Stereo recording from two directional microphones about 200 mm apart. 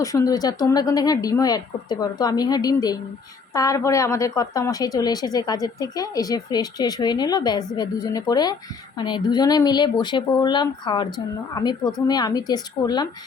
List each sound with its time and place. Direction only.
0.0 s a woman's voice: 15° left (ahead or behind)